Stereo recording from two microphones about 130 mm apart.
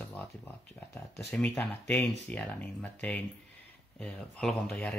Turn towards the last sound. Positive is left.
turn(degrees=5)  # may be behind; listen again after turning